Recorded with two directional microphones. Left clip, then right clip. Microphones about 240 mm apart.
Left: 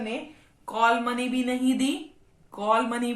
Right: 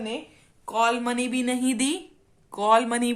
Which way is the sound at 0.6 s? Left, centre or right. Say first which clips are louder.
Left 1 dB; right.